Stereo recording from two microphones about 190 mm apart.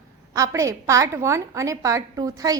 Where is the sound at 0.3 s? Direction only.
15° right (ahead or behind).